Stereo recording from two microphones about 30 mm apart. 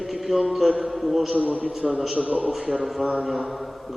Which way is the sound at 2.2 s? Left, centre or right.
Right.